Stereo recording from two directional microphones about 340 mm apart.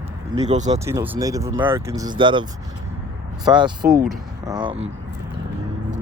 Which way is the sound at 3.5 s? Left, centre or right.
Centre.